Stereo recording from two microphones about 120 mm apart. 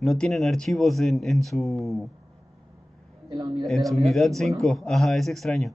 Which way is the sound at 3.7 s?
Centre (ahead or behind).